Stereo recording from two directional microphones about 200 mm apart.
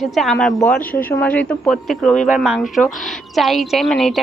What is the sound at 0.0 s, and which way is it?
A woman's voice, centre (ahead or behind).